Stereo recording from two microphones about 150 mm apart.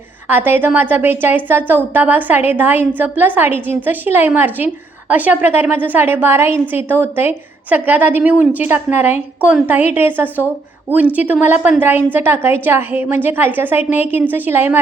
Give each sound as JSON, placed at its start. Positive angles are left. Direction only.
{"t": 0.3, "sound": "a woman's voice", "side_deg": -15}